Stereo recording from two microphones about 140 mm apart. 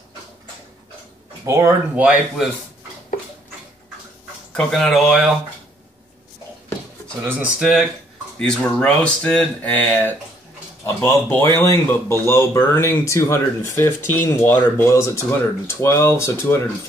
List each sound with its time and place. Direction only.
1.4 s speech: 20° right (ahead or behind)
2.0 s speech: 5° right (ahead or behind)
4.5 s speech: 5° left (ahead or behind)
7.2 s speech: 10° right (ahead or behind); by 16.6 s 15° left (ahead or behind)